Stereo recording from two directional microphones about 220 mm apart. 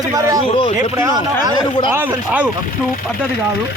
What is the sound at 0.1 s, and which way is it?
Speech, 15° right (ahead or behind).